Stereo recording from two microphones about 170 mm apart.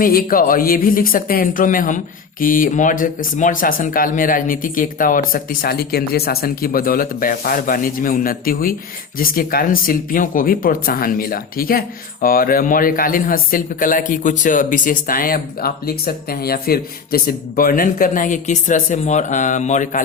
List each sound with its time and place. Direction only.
0.0 s speech: 60° left (ahead or behind)